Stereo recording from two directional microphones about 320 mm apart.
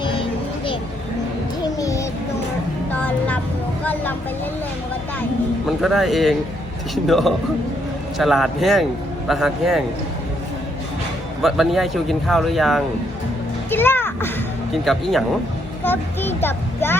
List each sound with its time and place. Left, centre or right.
0.0 s a sound: centre
1.6 s music: centre
2.9 s vehicle: centre
5.6 s a man's voice: centre
11.4 s a man's voice: centre